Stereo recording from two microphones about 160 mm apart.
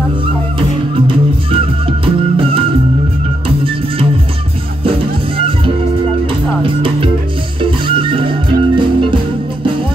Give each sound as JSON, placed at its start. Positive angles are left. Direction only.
{"t": 0.6, "sound": "music", "side_deg": -35}
{"t": 6.6, "sound": "music", "side_deg": -35}